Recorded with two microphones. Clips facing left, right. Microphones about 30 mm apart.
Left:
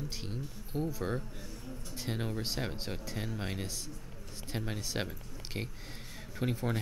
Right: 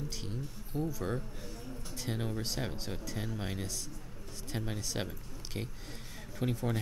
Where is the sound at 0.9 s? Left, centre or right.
Centre.